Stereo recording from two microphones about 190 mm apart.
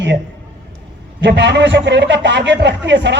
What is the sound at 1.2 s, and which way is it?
A man's voice, 70° right (ahead or behind).